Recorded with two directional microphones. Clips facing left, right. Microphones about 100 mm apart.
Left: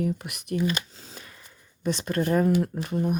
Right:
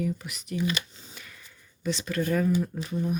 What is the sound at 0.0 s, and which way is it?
Speech, 60° left (ahead or behind).